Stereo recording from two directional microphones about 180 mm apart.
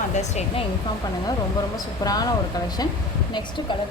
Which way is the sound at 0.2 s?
40° left (ahead or behind).